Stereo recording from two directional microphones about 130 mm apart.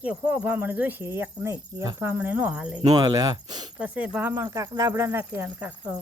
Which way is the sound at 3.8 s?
10° right (ahead or behind).